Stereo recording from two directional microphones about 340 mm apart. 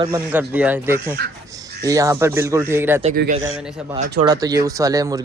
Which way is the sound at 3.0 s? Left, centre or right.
Right.